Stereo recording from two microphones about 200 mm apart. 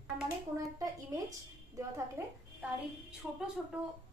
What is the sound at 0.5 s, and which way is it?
A woman's voice, 15° right (ahead or behind).